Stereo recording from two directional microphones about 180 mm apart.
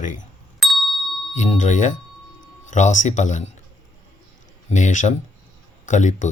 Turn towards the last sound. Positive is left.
turn(degrees=40)  # may be behind; listen again after turning